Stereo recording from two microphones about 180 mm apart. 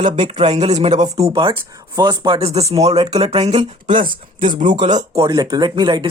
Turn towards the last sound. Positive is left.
turn(degrees=-25)  # may be behind; listen again after turning